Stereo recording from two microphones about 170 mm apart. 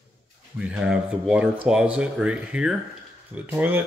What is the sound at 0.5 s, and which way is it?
Speech, 5° right (ahead or behind).